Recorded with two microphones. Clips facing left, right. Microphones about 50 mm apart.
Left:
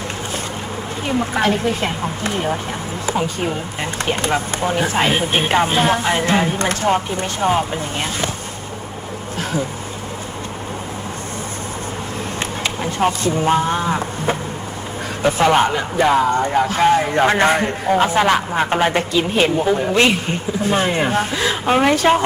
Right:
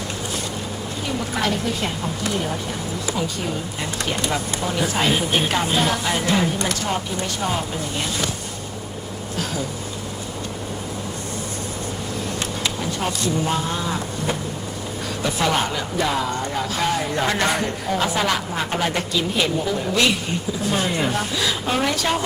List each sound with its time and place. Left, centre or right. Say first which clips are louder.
1.0 s speech: left 6 dB; left
9.4 s speech: left 5 dB; left
12.6 s speech: left 8 dB; left